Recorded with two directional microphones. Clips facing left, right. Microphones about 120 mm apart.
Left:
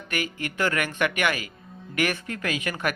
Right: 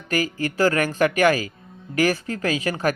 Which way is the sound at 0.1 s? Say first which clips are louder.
Right 7 dB; 35° right (ahead or behind).